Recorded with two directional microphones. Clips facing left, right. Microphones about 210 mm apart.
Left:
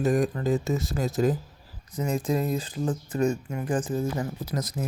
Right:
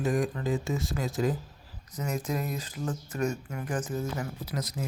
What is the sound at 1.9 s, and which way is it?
Speech, 30° left (ahead or behind).